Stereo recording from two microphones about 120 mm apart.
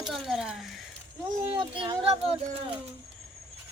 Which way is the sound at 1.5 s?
50° right (ahead or behind).